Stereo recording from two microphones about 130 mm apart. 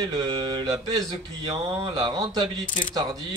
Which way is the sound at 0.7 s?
25° right (ahead or behind).